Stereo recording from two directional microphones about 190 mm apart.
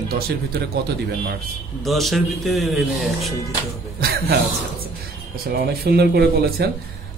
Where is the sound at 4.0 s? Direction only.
55° right (ahead or behind).